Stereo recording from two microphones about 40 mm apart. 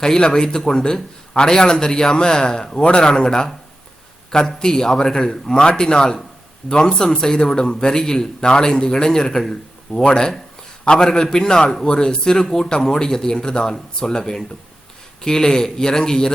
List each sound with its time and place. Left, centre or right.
0.0 s a man's voice: centre